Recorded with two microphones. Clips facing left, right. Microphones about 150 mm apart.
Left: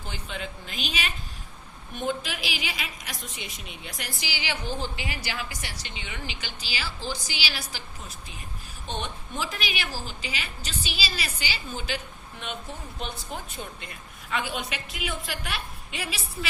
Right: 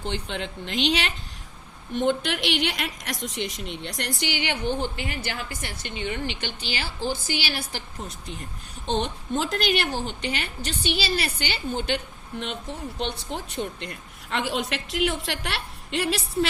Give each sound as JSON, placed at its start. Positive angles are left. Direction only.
{"t": 0.1, "sound": "a woman's voice", "side_deg": -70}
{"t": 1.9, "sound": "a woman's voice", "side_deg": -90}
{"t": 8.9, "sound": "a woman's voice", "side_deg": -90}
{"t": 9.3, "sound": "a woman's voice", "side_deg": -75}
{"t": 12.6, "sound": "speech", "side_deg": -25}
{"t": 13.6, "sound": "a woman's voice", "side_deg": -70}